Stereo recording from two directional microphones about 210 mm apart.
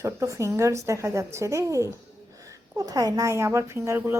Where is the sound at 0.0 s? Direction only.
15° right (ahead or behind).